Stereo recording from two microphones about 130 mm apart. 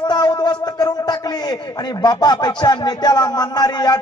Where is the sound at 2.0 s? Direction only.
35° left (ahead or behind).